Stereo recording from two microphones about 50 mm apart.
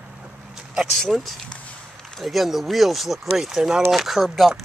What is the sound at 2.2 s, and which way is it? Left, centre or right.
Speech, centre.